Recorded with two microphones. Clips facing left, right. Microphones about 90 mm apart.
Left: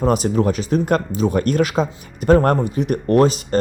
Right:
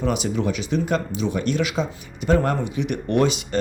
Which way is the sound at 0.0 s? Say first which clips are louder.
Left 6 dB; 40° left (ahead or behind).